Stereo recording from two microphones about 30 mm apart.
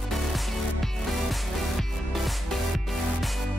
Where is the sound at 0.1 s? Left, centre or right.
Centre.